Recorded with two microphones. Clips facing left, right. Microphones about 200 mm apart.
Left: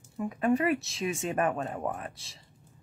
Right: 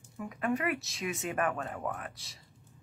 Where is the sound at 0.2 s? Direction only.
30° left (ahead or behind).